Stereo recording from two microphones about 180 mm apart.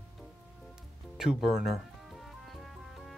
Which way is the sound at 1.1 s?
5° right (ahead or behind).